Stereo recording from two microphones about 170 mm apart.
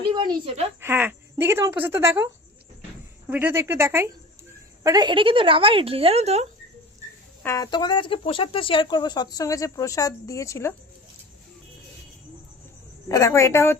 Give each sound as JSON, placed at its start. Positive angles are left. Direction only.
{"t": 0.1, "sound": "speech", "side_deg": -25}
{"t": 0.8, "sound": "speech", "side_deg": -10}
{"t": 7.4, "sound": "speech", "side_deg": 20}
{"t": 13.1, "sound": "a woman's voice", "side_deg": 20}